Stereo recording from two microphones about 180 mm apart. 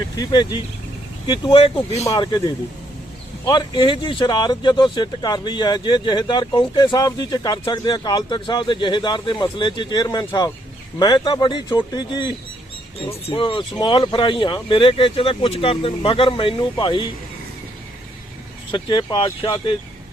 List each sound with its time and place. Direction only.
0.2 s speech: 25° left (ahead or behind)
2.0 s speech: 20° left (ahead or behind)
18.7 s speech: 25° left (ahead or behind)